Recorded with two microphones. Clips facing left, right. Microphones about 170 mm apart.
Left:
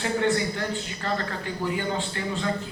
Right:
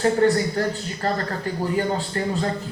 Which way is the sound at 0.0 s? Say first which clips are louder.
Right 6 dB; 40° right (ahead or behind).